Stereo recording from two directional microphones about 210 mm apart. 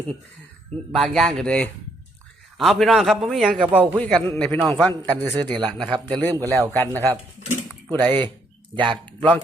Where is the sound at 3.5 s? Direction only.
25° right (ahead or behind).